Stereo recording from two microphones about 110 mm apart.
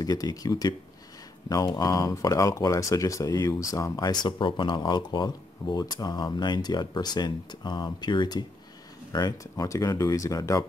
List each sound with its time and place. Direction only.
0.0 s speech: 35° left (ahead or behind)